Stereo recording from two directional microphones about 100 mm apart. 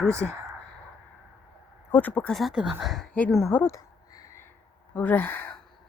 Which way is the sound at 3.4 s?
20° left (ahead or behind).